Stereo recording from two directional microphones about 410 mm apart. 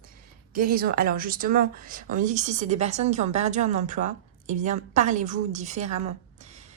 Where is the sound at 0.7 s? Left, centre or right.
Right.